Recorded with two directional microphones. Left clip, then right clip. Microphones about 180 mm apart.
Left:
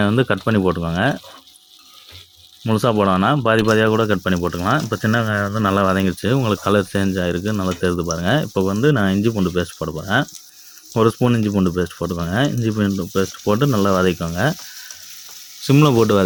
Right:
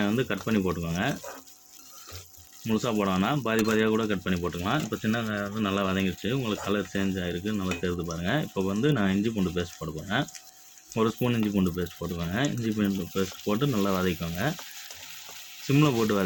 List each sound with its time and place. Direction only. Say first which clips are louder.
0.0 s speech: left 10 dB; 55° left (ahead or behind)
2.6 s speech: left 11 dB; 50° left (ahead or behind)
15.6 s speech: left 10 dB; 50° left (ahead or behind)